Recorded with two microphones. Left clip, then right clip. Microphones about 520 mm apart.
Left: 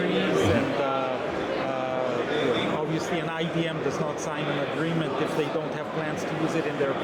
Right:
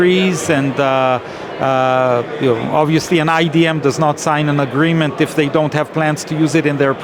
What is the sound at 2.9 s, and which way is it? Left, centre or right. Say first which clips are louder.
Speech: right 14 dB; right.